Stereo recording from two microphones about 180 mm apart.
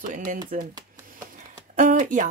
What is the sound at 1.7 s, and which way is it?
Speech, 45° right (ahead or behind).